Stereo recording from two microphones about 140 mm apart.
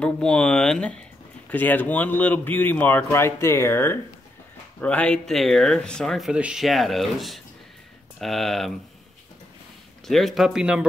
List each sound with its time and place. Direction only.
0.0 s speech: 5° left (ahead or behind)
10.0 s speech: centre (ahead or behind)